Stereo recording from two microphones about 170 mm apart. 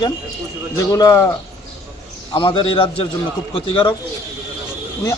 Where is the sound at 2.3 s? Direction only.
30° left (ahead or behind).